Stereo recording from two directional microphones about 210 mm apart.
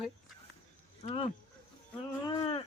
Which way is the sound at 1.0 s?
25° left (ahead or behind).